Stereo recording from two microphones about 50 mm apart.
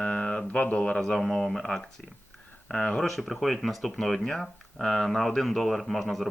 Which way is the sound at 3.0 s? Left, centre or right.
Centre.